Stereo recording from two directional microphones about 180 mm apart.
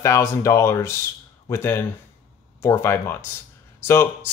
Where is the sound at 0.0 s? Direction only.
15° left (ahead or behind).